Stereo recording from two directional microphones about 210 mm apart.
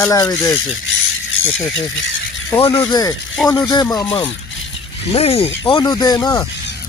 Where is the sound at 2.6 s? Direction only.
25° left (ahead or behind).